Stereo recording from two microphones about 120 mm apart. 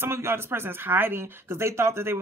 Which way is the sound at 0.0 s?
20° right (ahead or behind).